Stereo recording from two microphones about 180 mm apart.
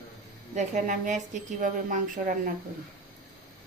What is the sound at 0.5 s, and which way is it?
A woman's voice, 45° right (ahead or behind).